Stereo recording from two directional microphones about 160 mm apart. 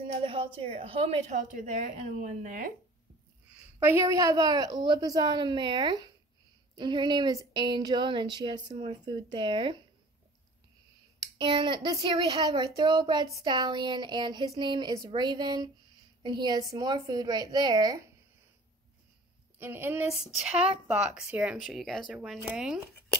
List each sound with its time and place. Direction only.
0.2 s a woman's voice: 35° right (ahead or behind); by 2.7 s 55° right (ahead or behind)
3.8 s speech: 15° right (ahead or behind)
11.1 s speech: 30° right (ahead or behind)
19.6 s a woman's voice: 15° right (ahead or behind)